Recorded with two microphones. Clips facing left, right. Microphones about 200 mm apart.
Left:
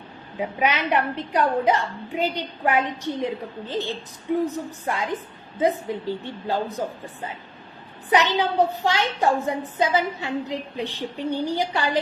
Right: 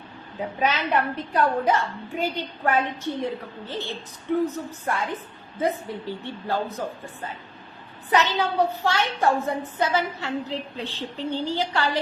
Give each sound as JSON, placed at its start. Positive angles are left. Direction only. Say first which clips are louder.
{"t": 0.3, "sound": "a woman's voice", "louder": "left 1 dB", "side_deg": 15}
{"t": 8.1, "sound": "a woman's voice", "louder": "left 2 dB", "side_deg": 15}